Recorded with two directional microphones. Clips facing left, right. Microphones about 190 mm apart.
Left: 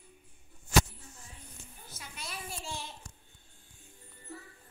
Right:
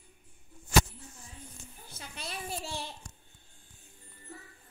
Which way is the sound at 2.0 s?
30° right (ahead or behind).